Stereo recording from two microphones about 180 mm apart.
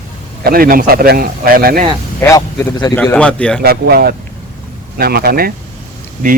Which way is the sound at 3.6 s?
60° right (ahead or behind).